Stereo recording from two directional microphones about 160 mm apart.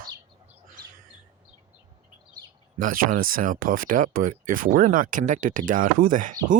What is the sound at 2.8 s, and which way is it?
Speech, 60° right (ahead or behind).